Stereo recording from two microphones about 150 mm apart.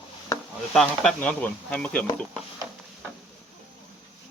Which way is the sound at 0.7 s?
5° left (ahead or behind).